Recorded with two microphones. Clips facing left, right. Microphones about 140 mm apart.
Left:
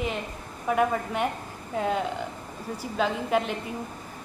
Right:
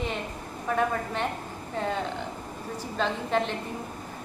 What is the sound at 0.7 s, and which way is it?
A woman's voice, 10° left (ahead or behind).